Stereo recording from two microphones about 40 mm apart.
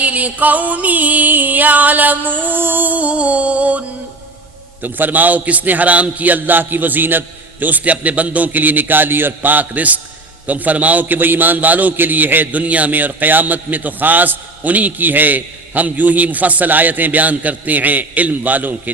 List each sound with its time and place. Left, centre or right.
0.0 s a man's voice: right
3.1 s music: right
4.8 s a man's voice: right